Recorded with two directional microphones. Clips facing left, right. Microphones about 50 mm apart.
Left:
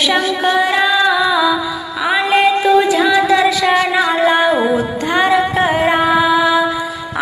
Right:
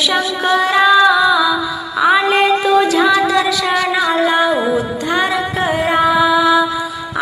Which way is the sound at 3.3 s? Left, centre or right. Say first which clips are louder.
Left 3 dB; left.